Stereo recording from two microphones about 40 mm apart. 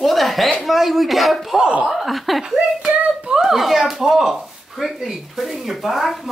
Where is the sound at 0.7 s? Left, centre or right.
Centre.